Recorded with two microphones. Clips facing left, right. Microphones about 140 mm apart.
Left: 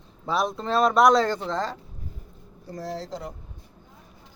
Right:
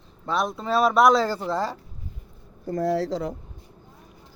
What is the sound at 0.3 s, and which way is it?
Speech, centre (ahead or behind).